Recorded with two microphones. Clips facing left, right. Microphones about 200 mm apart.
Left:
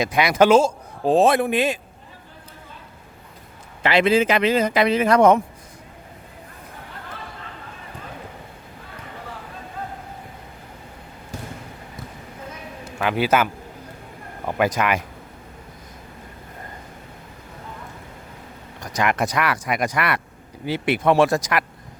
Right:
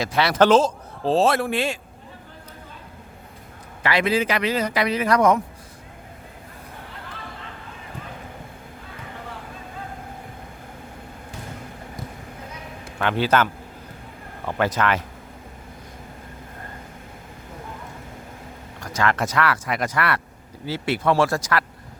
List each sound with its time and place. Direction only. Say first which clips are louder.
0.0 s speech: left 1 dB; 15° left (ahead or behind)
3.8 s speech: left 4 dB; 25° left (ahead or behind)
13.0 s speech: left 1 dB; 10° left (ahead or behind)
18.8 s speech: left 1 dB; 15° left (ahead or behind)